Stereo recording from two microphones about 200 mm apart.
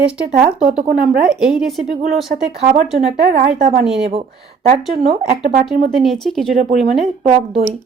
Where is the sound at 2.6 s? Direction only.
35° right (ahead or behind).